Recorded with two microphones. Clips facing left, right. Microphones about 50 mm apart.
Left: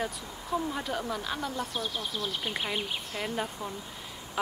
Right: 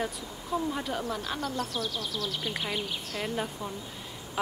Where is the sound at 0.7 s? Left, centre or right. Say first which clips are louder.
Even; centre.